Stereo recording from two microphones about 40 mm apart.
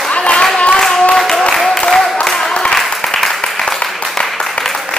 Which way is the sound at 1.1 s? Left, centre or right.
Centre.